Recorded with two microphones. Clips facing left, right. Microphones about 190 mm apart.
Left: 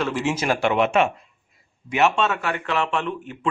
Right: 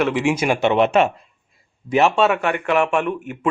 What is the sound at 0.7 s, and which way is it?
Speech, 35° right (ahead or behind).